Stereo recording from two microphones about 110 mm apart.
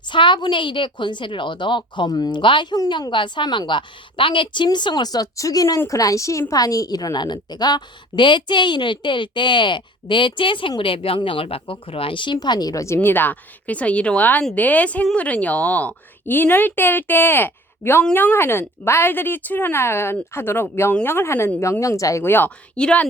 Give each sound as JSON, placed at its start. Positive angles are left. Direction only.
{"t": 0.1, "sound": "a woman's voice", "side_deg": 45}